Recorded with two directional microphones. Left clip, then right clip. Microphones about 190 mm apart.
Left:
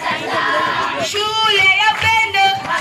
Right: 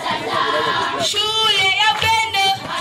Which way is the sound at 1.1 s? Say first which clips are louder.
Left 3 dB; 60° right (ahead or behind).